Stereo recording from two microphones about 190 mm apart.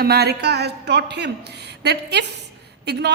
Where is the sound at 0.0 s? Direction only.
55° right (ahead or behind).